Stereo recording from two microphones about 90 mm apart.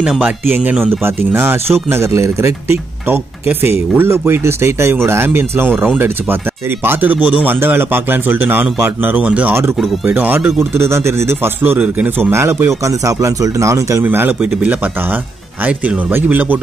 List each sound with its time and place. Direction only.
0.0 s speech: 10° right (ahead or behind); by 14.0 s 35° right (ahead or behind)
14.0 s speech: 20° right (ahead or behind)